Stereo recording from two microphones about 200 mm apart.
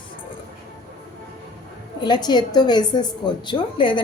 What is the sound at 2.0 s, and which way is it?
A woman's voice, 20° left (ahead or behind).